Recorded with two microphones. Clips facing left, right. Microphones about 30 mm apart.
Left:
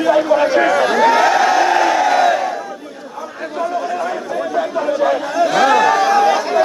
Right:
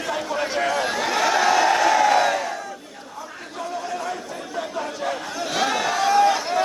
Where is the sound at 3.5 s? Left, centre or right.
Left.